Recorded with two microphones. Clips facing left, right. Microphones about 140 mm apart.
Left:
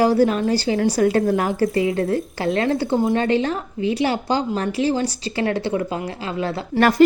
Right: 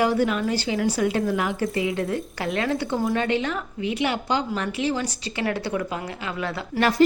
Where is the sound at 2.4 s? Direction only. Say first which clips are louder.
Left 4 dB; 25° left (ahead or behind).